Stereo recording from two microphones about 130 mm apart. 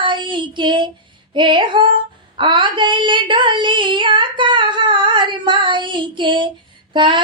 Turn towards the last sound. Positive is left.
turn(degrees=-40)  # may be behind; listen again after turning